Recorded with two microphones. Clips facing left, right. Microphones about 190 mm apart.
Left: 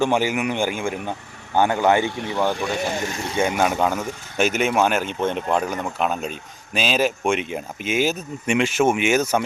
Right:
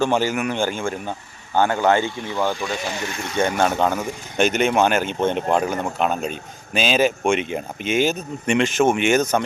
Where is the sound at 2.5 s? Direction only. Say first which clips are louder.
Left 2 dB; 60° left (ahead or behind); by 3.4 s 35° left (ahead or behind).